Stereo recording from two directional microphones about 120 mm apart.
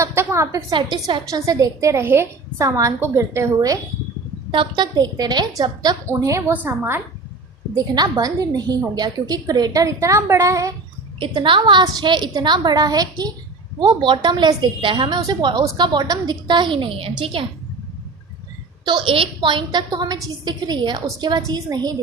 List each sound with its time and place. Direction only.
0.0 s a sound: 20° right (ahead or behind)
0.7 s a woman's voice: 40° right (ahead or behind)
1.3 s a woman's voice: 30° right (ahead or behind)
4.5 s a woman's voice: 40° right (ahead or behind)
6.5 s a woman's voice: 15° right (ahead or behind)
7.8 s a woman's voice: 35° right (ahead or behind)
11.2 s a woman's voice: 45° right (ahead or behind)
18.9 s a woman's voice: 45° right (ahead or behind)